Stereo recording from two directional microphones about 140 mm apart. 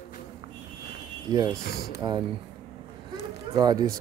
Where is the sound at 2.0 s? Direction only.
30° right (ahead or behind).